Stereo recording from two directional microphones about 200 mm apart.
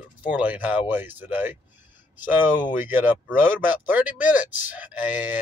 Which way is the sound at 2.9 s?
10° right (ahead or behind).